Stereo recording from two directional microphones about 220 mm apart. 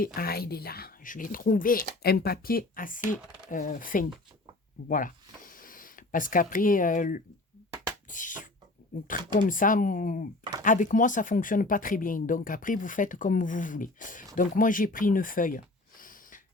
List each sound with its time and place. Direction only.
0.0 s speech: 45° left (ahead or behind)
8.1 s a sound: 35° left (ahead or behind)
9.0 s speech: 40° left (ahead or behind)